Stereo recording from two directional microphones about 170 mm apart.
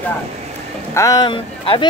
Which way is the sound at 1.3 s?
30° left (ahead or behind).